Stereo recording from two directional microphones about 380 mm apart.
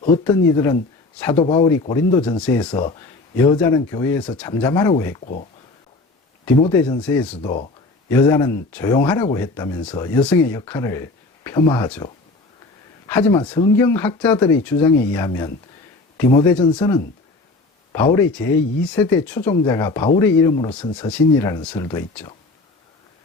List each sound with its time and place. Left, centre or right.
0.0 s speech: centre